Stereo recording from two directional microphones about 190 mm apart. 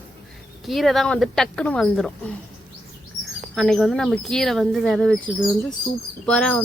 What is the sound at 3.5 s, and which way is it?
Speech, centre (ahead or behind).